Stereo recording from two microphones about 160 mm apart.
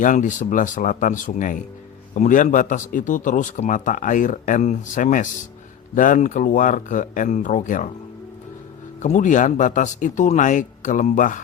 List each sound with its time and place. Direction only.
0.0 s a man's voice: 55° left (ahead or behind)
9.0 s a man's voice: 50° left (ahead or behind)